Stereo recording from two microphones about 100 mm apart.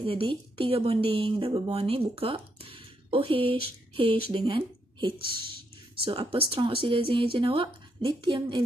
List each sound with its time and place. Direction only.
0.0 s a woman's voice: 60° right (ahead or behind)